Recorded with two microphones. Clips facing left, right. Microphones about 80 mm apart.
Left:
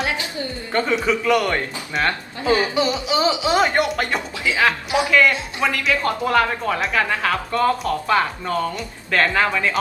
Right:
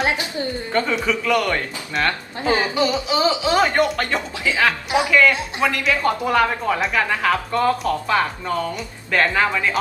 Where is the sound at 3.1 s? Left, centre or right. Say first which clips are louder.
Even; centre.